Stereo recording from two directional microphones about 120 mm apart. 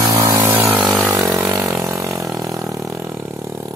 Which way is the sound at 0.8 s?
Centre (ahead or behind).